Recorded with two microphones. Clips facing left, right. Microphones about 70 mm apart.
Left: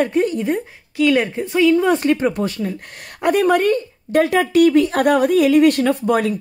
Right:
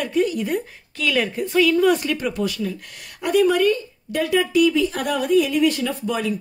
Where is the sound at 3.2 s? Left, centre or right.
Left.